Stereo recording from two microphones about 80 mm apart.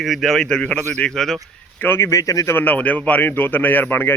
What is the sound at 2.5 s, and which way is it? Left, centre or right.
A man's voice, left.